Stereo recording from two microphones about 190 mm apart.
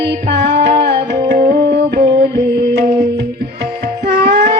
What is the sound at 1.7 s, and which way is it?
Mantra, 60° right (ahead or behind).